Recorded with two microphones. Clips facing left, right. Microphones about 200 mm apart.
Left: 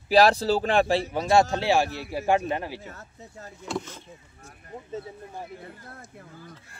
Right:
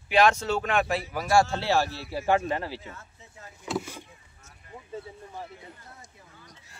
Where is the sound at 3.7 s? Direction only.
10° right (ahead or behind).